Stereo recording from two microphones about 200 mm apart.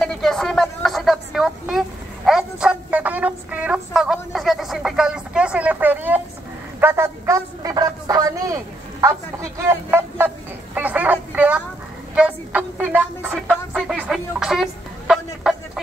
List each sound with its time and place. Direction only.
0.0 s vehicle: centre (ahead or behind)
6.8 s a sound: 10° right (ahead or behind)
13.5 s music: 5° right (ahead or behind)